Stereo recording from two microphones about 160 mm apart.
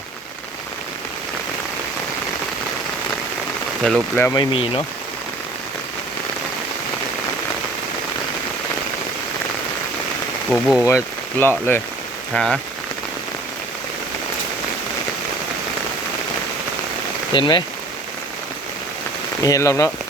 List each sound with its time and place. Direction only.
3.8 s speech: centre (ahead or behind)
4.4 s speech: 35° left (ahead or behind)
10.5 s speech: 10° left (ahead or behind)
17.3 s speech: 25° left (ahead or behind)
19.4 s speech: 20° left (ahead or behind)